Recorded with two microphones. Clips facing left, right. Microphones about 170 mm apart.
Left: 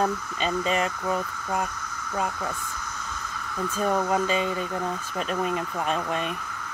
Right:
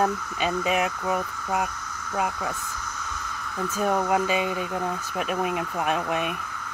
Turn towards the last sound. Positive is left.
turn(degrees=-10)  # may be behind; listen again after turning